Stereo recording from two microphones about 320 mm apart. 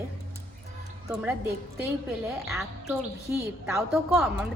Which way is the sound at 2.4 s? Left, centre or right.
Centre.